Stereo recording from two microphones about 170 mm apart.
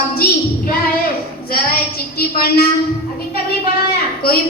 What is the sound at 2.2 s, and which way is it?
Speech, 65° left (ahead or behind).